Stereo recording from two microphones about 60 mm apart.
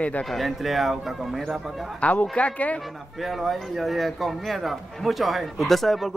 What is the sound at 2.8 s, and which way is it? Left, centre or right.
Speech, centre.